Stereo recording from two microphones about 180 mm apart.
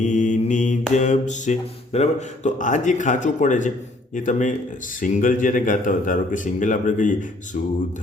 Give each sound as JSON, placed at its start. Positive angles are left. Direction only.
{"t": 0.0, "sound": "mantra", "side_deg": 40}